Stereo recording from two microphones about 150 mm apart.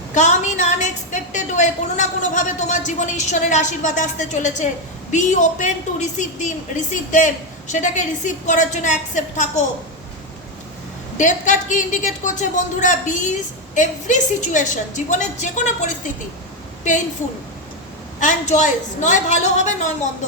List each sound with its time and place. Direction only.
0.1 s a woman's voice: 55° left (ahead or behind)
11.2 s a woman's voice: 55° left (ahead or behind)
18.2 s a woman's voice: 55° left (ahead or behind)